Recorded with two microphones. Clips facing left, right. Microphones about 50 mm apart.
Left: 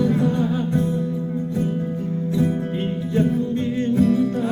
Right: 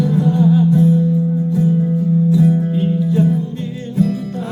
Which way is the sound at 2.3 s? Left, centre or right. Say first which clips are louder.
Right 7 dB; left.